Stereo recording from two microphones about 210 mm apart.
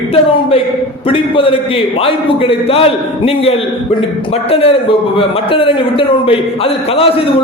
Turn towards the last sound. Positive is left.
turn(degrees=25)  # may be behind; listen again after turning